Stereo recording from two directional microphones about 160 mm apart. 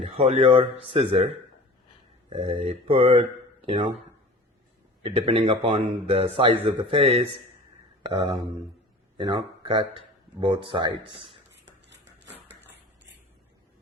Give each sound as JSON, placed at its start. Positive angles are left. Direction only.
{"t": 0.0, "sound": "speech", "side_deg": -45}
{"t": 5.0, "sound": "speech", "side_deg": -35}